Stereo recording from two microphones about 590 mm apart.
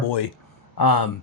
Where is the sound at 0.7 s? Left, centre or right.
Left.